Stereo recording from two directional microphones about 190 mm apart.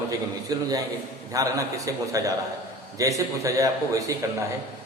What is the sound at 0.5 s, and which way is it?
A man's voice, 20° right (ahead or behind).